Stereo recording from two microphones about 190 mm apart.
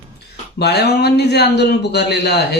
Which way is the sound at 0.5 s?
60° left (ahead or behind).